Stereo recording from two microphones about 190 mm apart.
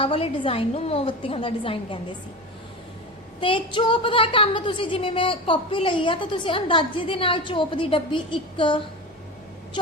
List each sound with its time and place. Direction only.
0.0 s a woman's voice: 30° left (ahead or behind)
3.4 s a woman's voice: 25° left (ahead or behind)